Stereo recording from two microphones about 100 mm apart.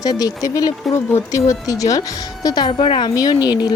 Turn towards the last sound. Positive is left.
turn(degrees=40)  # may be behind; listen again after turning